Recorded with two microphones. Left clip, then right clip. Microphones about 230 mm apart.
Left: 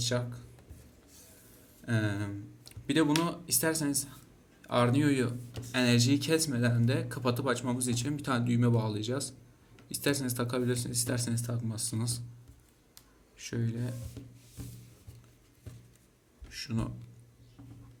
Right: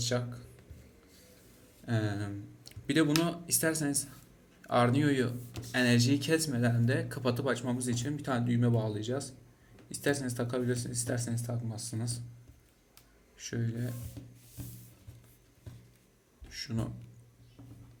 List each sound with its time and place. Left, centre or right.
0.0 s speech: centre
1.9 s speech: centre
13.4 s speech: centre
16.5 s a sound: centre